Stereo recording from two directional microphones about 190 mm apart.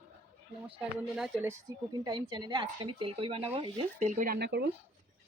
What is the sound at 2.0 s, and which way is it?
Speech, 25° right (ahead or behind).